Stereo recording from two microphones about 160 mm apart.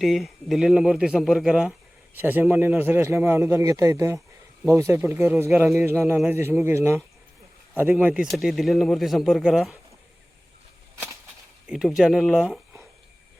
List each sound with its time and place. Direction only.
0.0 s a man's voice: centre (ahead or behind)
5.5 s speech: centre (ahead or behind)
5.7 s a man's voice: 15° right (ahead or behind)
11.7 s speech: 5° right (ahead or behind)